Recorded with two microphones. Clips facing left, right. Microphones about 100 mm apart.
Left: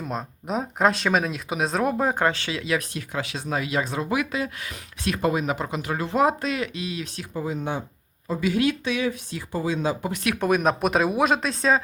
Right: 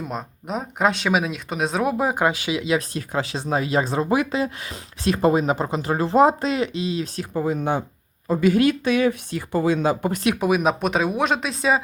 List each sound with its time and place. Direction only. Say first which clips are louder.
0.0 s speech: right 1 dB; centre (ahead or behind)
2.7 s speech: right 4 dB; 35° right (ahead or behind)
7.3 s speech: right 5 dB; 55° right (ahead or behind)
10.3 s speech: right 1 dB; 5° right (ahead or behind)